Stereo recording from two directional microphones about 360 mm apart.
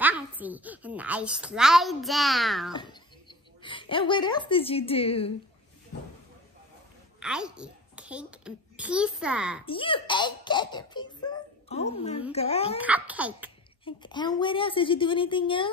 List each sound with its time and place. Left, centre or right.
0.0 s a woman's voice: centre
2.7 s speech: centre
7.2 s a child's voice: centre
9.7 s a child's voice: centre
12.8 s a woman's voice: centre
13.8 s a child's voice: centre